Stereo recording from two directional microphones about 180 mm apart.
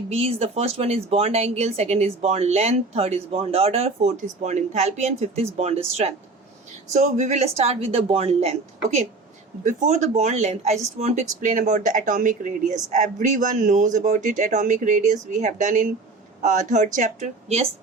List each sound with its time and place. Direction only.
0.1 s speech: 35° right (ahead or behind)